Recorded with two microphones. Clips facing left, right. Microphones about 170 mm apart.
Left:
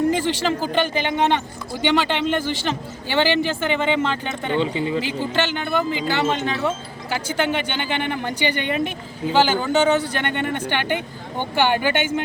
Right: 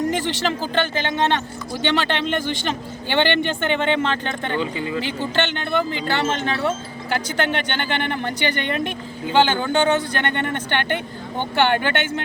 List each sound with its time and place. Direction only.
0.1 s speech: 10° left (ahead or behind)
4.6 s speech: 25° left (ahead or behind)
4.9 s speech: 5° left (ahead or behind)